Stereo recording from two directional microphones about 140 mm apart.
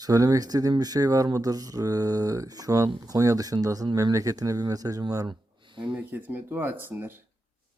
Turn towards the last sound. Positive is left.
turn(degrees=-15)  # may be behind; listen again after turning